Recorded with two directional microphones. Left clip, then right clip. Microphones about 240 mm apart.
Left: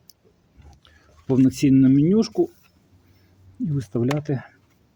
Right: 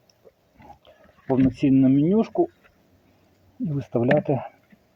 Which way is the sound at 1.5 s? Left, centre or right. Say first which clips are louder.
Left 2 dB; centre.